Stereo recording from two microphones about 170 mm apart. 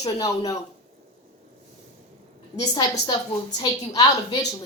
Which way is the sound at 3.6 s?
25° left (ahead or behind).